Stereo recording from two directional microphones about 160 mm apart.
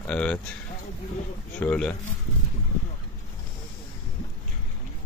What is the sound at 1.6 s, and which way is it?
Speech, 5° left (ahead or behind).